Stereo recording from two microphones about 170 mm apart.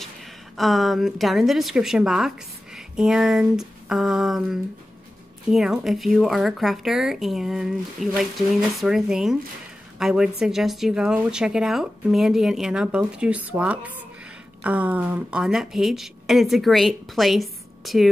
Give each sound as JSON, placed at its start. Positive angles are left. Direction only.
{"t": 0.0, "sound": "a woman's voice", "side_deg": 0}